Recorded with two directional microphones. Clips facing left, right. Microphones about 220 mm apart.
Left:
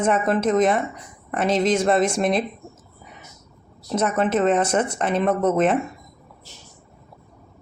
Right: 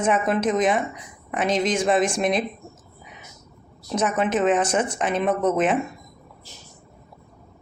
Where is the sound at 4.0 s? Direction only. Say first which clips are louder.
Left 1 dB; 5° right (ahead or behind).